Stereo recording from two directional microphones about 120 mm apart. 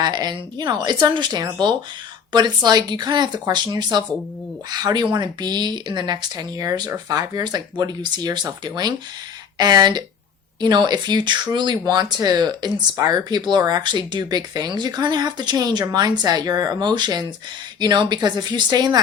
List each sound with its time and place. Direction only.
0.0 s speech: 35° right (ahead or behind)